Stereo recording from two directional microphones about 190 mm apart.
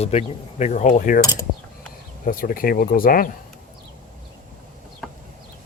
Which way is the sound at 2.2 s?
50° left (ahead or behind).